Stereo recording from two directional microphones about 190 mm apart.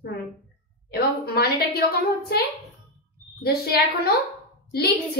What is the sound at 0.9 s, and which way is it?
A woman's voice, 55° left (ahead or behind).